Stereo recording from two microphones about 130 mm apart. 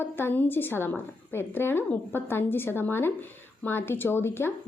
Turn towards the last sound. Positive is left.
turn(degrees=15)  # may be behind; listen again after turning